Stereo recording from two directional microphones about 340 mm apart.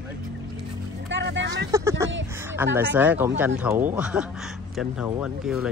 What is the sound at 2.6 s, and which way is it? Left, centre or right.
Speech, centre.